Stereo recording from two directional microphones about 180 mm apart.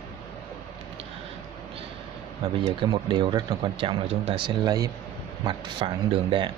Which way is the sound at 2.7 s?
25° right (ahead or behind).